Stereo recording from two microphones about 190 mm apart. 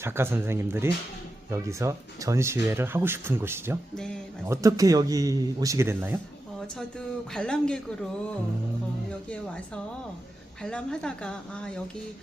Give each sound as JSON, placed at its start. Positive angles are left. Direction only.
{"t": 0.0, "sound": "speech", "side_deg": -10}
{"t": 3.9, "sound": "speech", "side_deg": 5}
{"t": 4.4, "sound": "speech", "side_deg": -15}
{"t": 7.3, "sound": "speech", "side_deg": 5}
{"t": 10.6, "sound": "speech", "side_deg": 5}